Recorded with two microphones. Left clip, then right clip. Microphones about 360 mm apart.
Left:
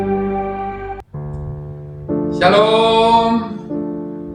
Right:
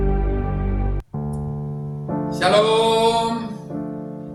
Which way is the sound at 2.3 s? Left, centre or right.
Right.